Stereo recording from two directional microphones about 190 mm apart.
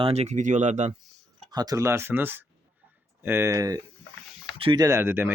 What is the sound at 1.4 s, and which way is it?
A man's voice, 20° right (ahead or behind).